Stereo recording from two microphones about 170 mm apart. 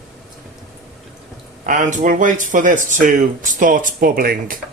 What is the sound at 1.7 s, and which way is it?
Speech, 50° right (ahead or behind).